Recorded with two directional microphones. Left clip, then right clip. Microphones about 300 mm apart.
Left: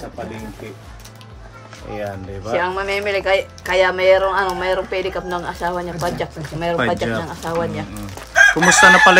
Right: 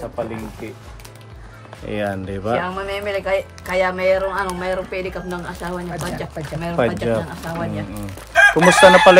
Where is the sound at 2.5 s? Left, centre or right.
Left.